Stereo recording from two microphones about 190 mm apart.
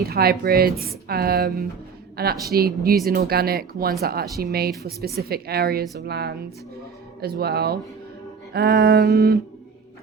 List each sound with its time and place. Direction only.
0.0 s a woman's voice: 55° right (ahead or behind)